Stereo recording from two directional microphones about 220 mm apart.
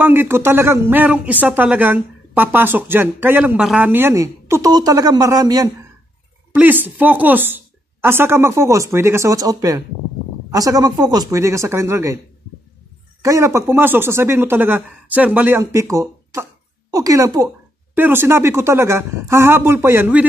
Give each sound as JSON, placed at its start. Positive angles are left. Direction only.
{"t": 0.0, "sound": "speech", "side_deg": -10}
{"t": 13.2, "sound": "speech", "side_deg": -15}